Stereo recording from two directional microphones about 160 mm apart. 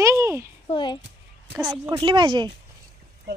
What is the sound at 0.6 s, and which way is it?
Speech, 30° left (ahead or behind).